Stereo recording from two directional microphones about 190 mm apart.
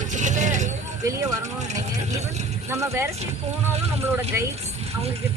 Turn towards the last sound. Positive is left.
turn(degrees=-15)  # may be behind; listen again after turning